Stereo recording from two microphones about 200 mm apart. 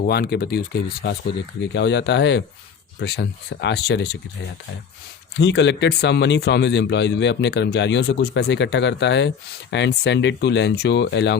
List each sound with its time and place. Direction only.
0.0 s speech: 50° left (ahead or behind)
5.4 s speech: 60° left (ahead or behind)